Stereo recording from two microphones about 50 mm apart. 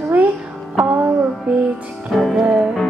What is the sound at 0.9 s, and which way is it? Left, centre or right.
Music, right.